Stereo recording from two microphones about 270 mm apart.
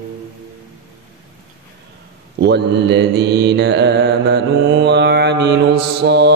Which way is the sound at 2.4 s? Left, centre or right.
Right.